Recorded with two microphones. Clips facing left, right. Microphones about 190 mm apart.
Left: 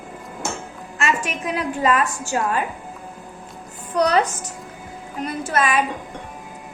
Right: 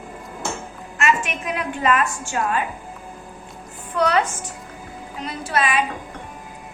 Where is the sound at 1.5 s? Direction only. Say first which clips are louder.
Left 1 dB; 35° left (ahead or behind).